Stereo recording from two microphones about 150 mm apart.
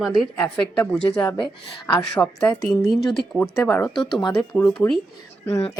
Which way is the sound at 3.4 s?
20° left (ahead or behind).